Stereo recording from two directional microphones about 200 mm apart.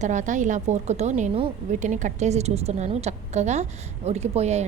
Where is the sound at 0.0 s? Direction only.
35° right (ahead or behind).